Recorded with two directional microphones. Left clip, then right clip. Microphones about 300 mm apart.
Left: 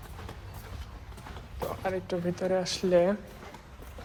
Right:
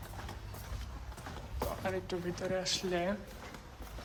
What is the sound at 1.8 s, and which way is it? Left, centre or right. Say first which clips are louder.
Speech: left 8 dB; centre.